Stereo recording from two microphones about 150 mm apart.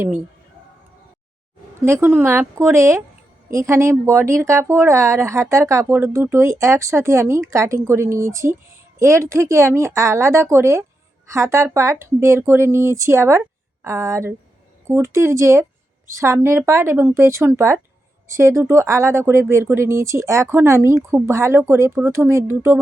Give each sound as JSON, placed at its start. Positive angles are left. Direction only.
{"t": 1.8, "sound": "speech", "side_deg": -15}